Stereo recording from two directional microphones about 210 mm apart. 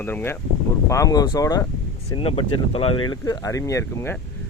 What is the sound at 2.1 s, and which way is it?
Speech, 25° left (ahead or behind).